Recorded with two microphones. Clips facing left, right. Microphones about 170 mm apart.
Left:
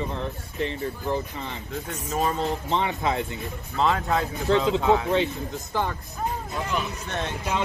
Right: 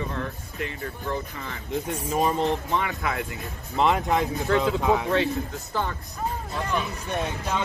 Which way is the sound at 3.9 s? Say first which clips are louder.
Right 1 dB; 20° right (ahead or behind).